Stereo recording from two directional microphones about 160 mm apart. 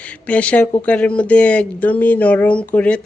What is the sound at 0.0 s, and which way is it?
Speech, 10° left (ahead or behind).